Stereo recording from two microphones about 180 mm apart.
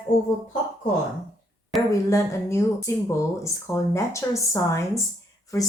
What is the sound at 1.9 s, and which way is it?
Speech, 15° left (ahead or behind).